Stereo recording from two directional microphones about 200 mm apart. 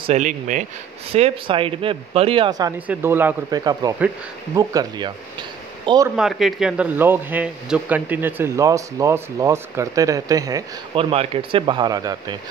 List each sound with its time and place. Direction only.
0.0 s speech: 35° right (ahead or behind)
2.9 s speech: 10° right (ahead or behind)
6.1 s speech: centre (ahead or behind); by 11.1 s 15° right (ahead or behind)
11.1 s speech: 25° right (ahead or behind)